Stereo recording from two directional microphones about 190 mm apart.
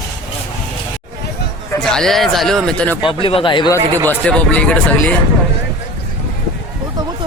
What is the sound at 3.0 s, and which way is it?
Speech, 25° left (ahead or behind).